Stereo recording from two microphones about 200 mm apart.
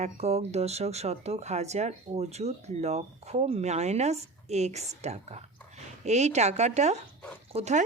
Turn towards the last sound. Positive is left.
turn(degrees=-35)  # may be behind; listen again after turning